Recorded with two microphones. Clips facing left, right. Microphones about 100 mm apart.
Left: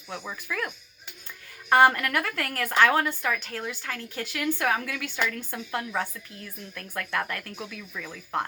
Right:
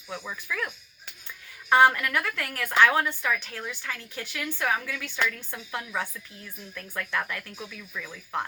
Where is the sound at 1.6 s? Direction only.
45° left (ahead or behind).